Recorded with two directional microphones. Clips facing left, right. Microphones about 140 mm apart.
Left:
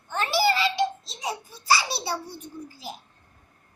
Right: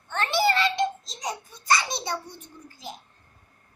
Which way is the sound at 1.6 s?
5° left (ahead or behind).